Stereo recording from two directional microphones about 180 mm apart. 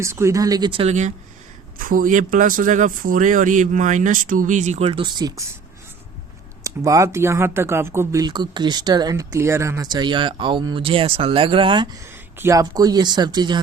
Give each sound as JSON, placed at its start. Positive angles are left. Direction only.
{"t": 0.0, "sound": "speech", "side_deg": -15}
{"t": 6.6, "sound": "speech", "side_deg": -20}
{"t": 12.0, "sound": "speech", "side_deg": -15}